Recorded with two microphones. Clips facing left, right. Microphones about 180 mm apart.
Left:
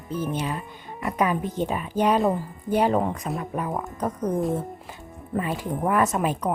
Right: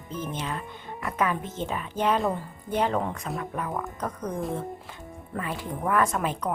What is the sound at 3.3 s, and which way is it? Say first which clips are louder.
Speech: left 3 dB; 20° left (ahead or behind).